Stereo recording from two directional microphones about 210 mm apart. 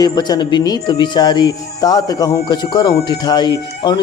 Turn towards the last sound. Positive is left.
turn(degrees=20)  # may be behind; listen again after turning